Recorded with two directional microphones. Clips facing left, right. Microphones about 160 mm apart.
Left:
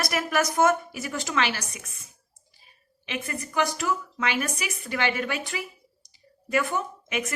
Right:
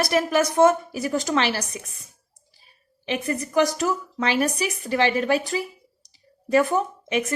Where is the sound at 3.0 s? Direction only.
35° right (ahead or behind).